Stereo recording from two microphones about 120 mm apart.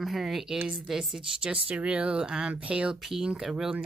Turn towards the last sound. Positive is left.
turn(degrees=-5)  # may be behind; listen again after turning